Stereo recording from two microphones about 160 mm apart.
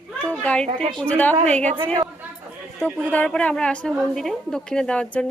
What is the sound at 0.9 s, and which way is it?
Speech, 10° left (ahead or behind).